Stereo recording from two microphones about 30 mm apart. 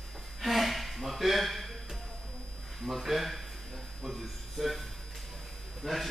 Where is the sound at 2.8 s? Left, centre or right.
Centre.